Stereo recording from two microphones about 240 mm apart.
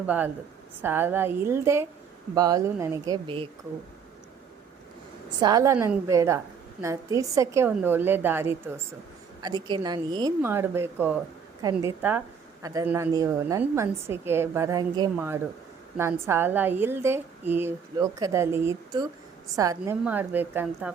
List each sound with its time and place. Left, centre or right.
0.0 s a woman's voice: centre
3.2 s a woman's voice: right
5.4 s a woman's voice: centre